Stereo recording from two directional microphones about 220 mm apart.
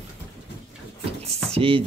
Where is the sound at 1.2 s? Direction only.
25° right (ahead or behind).